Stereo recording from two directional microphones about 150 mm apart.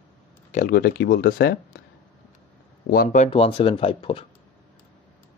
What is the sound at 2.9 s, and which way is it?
Speech, 75° left (ahead or behind).